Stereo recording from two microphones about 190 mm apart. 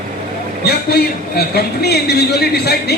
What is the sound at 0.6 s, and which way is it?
A man's voice, 55° left (ahead or behind).